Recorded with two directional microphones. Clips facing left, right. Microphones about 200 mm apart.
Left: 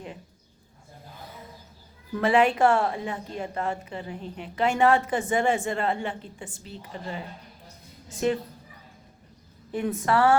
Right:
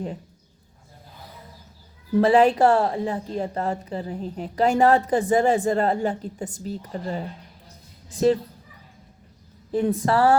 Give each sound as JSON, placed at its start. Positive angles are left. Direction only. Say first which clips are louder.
{"t": 2.1, "sound": "a woman's voice", "louder": "right 5 dB", "side_deg": -35}
{"t": 9.7, "sound": "a woman's voice", "louder": "right 4 dB", "side_deg": -35}